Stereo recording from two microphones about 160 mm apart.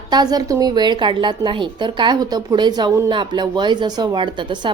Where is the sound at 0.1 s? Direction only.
25° right (ahead or behind).